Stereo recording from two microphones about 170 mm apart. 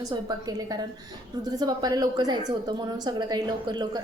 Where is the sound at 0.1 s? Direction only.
25° right (ahead or behind).